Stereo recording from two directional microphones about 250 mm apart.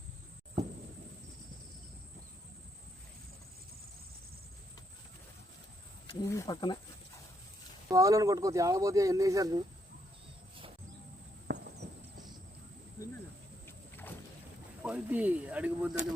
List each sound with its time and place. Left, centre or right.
6.1 s speech: centre
7.9 s speech: centre
11.4 s a sound: right
13.7 s vehicle: centre
14.8 s speech: centre